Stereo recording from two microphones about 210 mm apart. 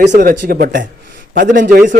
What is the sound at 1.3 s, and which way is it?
Speech, 40° right (ahead or behind).